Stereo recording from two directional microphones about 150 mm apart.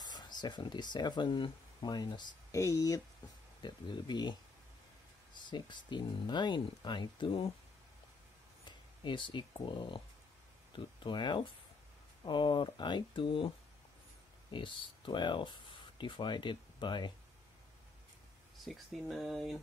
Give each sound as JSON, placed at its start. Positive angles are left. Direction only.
{"t": 0.0, "sound": "speech", "side_deg": 30}
{"t": 8.6, "sound": "speech", "side_deg": 30}
{"t": 14.5, "sound": "speech", "side_deg": 35}
{"t": 18.6, "sound": "speech", "side_deg": 0}